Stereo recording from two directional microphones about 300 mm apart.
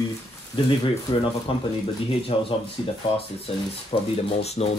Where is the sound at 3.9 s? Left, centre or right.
Centre.